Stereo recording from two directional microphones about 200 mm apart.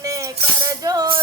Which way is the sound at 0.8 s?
20° right (ahead or behind).